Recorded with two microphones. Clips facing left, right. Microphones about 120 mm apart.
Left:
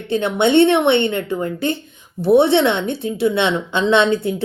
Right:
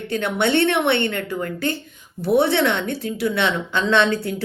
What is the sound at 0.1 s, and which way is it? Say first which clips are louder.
A woman's voice: left 5 dB; 20° left (ahead or behind).